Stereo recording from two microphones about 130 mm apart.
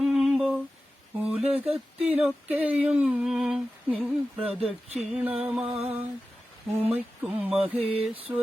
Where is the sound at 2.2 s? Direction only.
10° right (ahead or behind).